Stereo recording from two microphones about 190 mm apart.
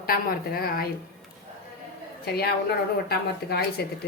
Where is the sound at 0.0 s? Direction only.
50° left (ahead or behind).